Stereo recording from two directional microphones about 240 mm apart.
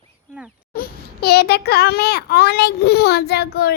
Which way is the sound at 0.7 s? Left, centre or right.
Left.